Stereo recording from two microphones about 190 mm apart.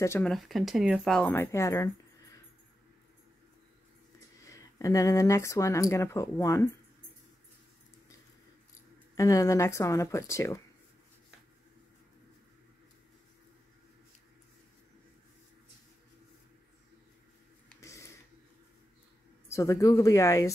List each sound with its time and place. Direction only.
0.0 s speech: 15° left (ahead or behind)
0.3 s speech: centre (ahead or behind)
1.3 s speech: 15° left (ahead or behind)
4.4 s speech: 15° left (ahead or behind)
9.1 s speech: 15° left (ahead or behind)
17.7 s a sound: 15° left (ahead or behind)
19.5 s speech: 15° left (ahead or behind)